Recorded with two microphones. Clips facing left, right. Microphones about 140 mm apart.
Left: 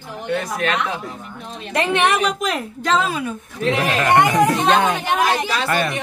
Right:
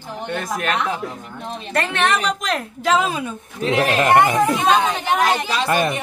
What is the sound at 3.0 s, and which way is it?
Speech, 20° right (ahead or behind).